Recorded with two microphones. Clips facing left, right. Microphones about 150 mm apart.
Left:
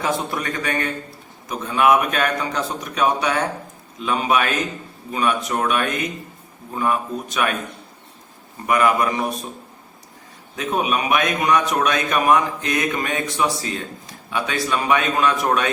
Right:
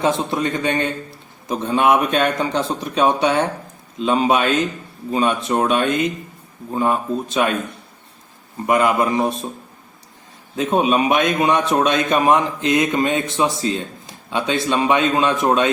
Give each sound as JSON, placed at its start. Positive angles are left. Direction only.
{"t": 0.0, "sound": "a man's voice", "side_deg": -25}
{"t": 8.6, "sound": "a man's voice", "side_deg": -25}
{"t": 10.6, "sound": "a man's voice", "side_deg": -30}